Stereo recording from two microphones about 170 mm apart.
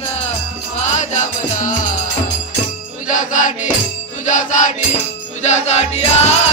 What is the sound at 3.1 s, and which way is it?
Music, 50° left (ahead or behind).